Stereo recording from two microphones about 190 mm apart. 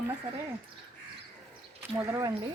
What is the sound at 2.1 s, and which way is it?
Speech, 15° right (ahead or behind).